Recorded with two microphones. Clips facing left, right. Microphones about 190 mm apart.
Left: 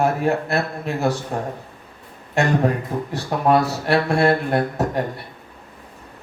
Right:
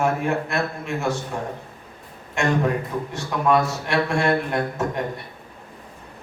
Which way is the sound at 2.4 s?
35° left (ahead or behind).